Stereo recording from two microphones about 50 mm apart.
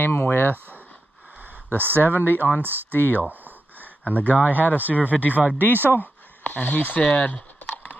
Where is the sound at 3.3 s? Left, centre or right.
Right.